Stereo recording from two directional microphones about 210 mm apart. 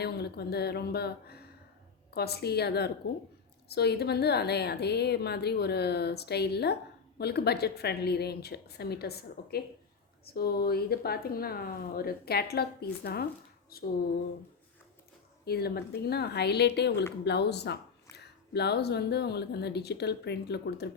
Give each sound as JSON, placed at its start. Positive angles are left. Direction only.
{"t": 0.0, "sound": "speech", "side_deg": 50}
{"t": 15.4, "sound": "speech", "side_deg": 50}